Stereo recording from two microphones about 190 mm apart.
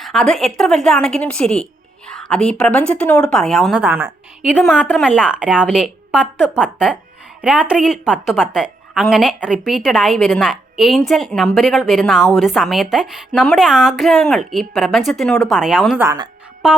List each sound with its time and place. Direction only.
0.0 s a woman's voice: centre (ahead or behind)
4.5 s a woman's voice: 5° left (ahead or behind)
5.1 s a woman's voice: 5° right (ahead or behind)
16.0 s speech: 20° right (ahead or behind)
16.6 s a woman's voice: 5° right (ahead or behind)